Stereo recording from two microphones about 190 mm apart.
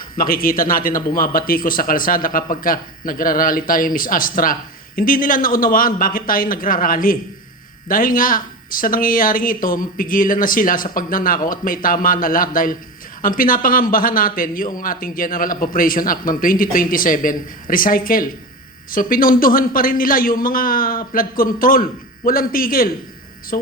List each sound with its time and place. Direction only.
0.2 s speech: 50° left (ahead or behind)